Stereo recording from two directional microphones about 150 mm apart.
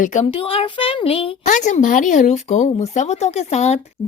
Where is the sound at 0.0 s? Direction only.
55° left (ahead or behind).